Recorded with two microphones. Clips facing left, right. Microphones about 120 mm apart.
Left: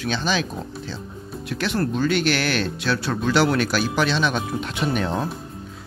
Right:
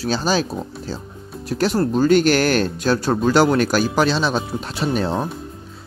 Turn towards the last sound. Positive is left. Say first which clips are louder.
# right 3 dB
turn(degrees=-35)  # may be behind; listen again after turning